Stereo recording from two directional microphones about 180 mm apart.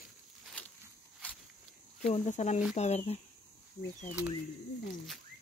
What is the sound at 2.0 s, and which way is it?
Speech, 40° left (ahead or behind).